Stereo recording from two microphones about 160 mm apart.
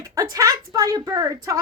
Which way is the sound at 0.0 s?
20° right (ahead or behind).